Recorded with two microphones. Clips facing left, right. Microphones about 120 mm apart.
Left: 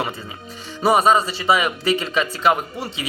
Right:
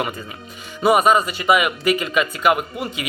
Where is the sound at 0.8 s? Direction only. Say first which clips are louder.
Right 1 dB; 30° left (ahead or behind).